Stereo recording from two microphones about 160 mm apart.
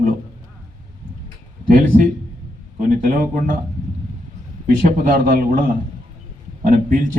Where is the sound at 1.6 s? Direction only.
55° right (ahead or behind).